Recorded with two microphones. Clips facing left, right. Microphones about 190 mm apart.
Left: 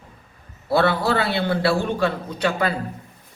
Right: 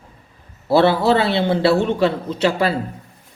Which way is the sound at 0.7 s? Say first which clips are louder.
Right 5 dB; 25° right (ahead or behind).